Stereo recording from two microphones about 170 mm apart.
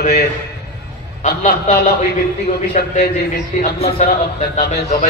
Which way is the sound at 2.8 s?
50° left (ahead or behind).